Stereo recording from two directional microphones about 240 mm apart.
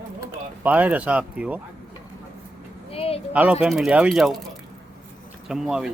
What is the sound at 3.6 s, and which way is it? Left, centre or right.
Speech, centre.